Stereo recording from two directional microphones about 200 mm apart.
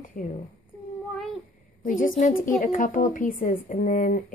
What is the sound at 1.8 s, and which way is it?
Speech, 40° left (ahead or behind).